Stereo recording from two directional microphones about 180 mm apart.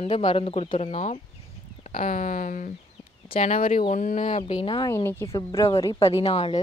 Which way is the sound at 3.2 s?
35° left (ahead or behind).